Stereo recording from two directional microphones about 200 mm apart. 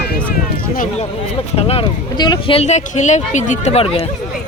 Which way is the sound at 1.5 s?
30° left (ahead or behind).